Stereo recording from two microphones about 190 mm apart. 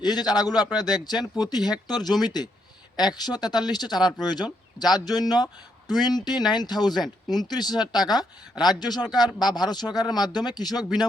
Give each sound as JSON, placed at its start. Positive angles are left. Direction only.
{"t": 0.0, "sound": "speech", "side_deg": 20}